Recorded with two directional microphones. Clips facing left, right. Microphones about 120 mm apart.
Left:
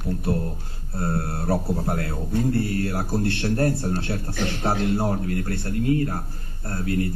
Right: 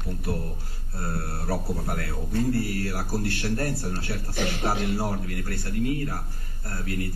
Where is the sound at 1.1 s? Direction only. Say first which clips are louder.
Left 5 dB; 25° left (ahead or behind).